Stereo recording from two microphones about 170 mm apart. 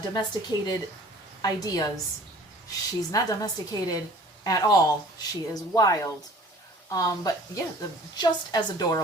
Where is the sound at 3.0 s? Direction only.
20° left (ahead or behind).